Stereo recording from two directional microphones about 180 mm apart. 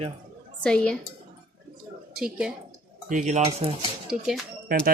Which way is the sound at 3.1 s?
40° right (ahead or behind).